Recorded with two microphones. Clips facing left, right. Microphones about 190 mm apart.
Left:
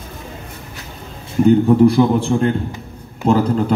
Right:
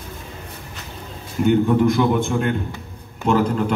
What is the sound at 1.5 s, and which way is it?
A man's voice, 35° left (ahead or behind).